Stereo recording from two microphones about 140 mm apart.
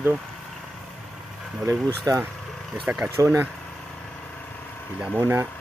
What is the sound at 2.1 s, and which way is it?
Speech, 20° right (ahead or behind).